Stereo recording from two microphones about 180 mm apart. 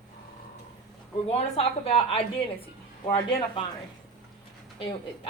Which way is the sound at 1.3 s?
35° left (ahead or behind).